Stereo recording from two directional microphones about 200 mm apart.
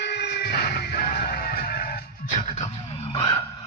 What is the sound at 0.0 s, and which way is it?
Music, 55° left (ahead or behind).